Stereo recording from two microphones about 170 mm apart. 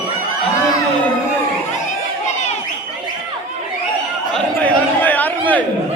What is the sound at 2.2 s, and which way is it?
Crowd, 40° left (ahead or behind).